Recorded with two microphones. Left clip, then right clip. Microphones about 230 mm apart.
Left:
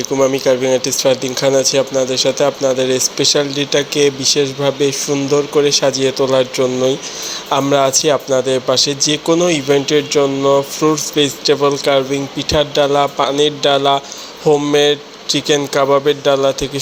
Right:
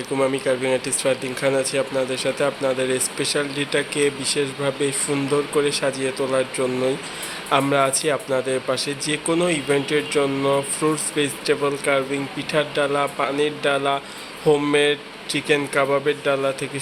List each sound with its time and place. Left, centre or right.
0.2 s speech: centre